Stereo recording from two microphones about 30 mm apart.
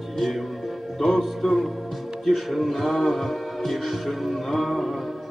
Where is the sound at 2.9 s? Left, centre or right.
Centre.